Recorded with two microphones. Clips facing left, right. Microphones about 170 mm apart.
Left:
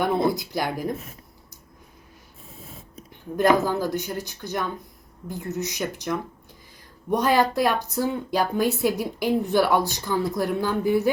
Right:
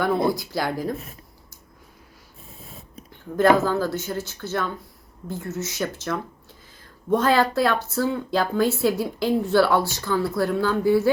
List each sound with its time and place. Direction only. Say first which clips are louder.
0.0 s speech: right 1 dB; 20° left (ahead or behind)
3.3 s a woman's voice: right 2 dB; 15° left (ahead or behind)